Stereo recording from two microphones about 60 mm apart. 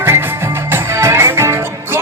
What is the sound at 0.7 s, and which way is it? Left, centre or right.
Music, right.